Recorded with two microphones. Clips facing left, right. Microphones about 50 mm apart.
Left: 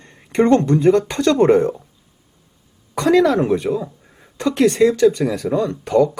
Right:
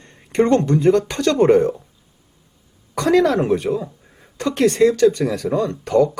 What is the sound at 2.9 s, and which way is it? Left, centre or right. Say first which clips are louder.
Speech: left 1 dB; left.